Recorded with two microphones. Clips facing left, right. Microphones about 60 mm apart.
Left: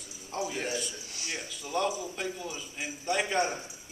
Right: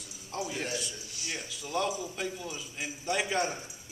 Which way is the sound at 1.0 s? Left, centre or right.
Left.